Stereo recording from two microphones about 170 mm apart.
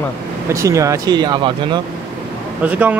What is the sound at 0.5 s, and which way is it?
Speech, 20° right (ahead or behind).